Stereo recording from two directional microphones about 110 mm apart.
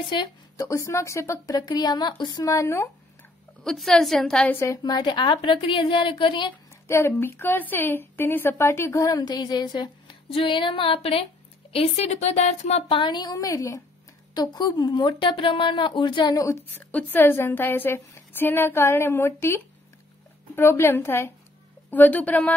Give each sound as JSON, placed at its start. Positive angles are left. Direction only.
{"t": 0.6, "sound": "a woman's voice", "side_deg": 30}
{"t": 3.6, "sound": "a woman's voice", "side_deg": 0}
{"t": 4.5, "sound": "a woman's voice", "side_deg": 20}
{"t": 4.8, "sound": "speech", "side_deg": 40}
{"t": 6.9, "sound": "a woman's voice", "side_deg": 20}
{"t": 11.7, "sound": "speech", "side_deg": 75}
{"t": 16.3, "sound": "a woman's voice", "side_deg": 25}